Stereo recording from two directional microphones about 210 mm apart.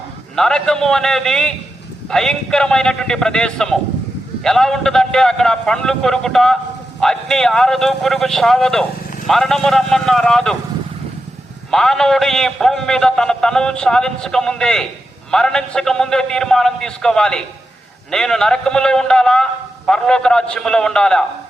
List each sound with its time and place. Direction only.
0.3 s a man's voice: 5° left (ahead or behind)
11.7 s a man's voice: centre (ahead or behind)